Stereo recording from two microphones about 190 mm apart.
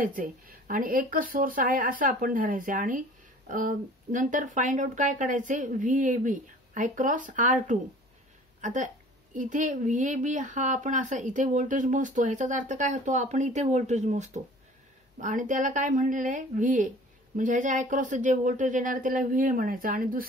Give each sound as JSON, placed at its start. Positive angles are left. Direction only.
{"t": 0.0, "sound": "a woman's voice", "side_deg": -50}